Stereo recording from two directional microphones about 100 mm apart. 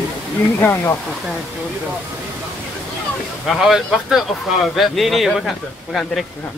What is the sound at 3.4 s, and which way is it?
Speech, 5° right (ahead or behind).